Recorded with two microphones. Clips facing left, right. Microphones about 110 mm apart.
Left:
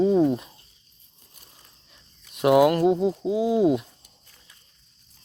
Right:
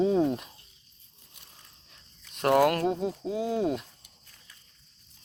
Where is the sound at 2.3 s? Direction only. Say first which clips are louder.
Left 5 dB; 5° left (ahead or behind).